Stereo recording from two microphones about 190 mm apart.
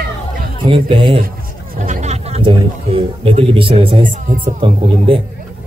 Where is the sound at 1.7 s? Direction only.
40° right (ahead or behind).